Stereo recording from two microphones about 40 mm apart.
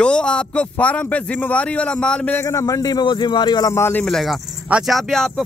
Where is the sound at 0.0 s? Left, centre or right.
Left.